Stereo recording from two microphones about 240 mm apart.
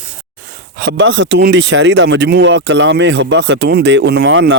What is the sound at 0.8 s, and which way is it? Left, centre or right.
Speech, right.